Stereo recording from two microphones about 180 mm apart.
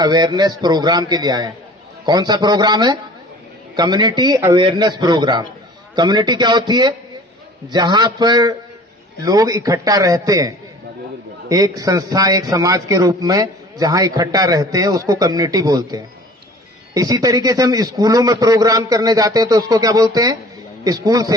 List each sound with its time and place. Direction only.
0.0 s a man's voice: 20° right (ahead or behind)